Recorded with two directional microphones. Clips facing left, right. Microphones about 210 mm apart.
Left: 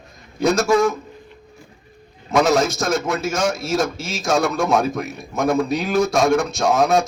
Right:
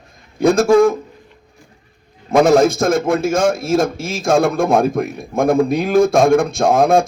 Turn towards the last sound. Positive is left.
turn(degrees=-55)  # may be behind; listen again after turning